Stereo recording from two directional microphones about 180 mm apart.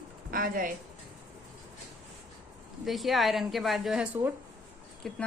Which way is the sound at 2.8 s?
Centre (ahead or behind).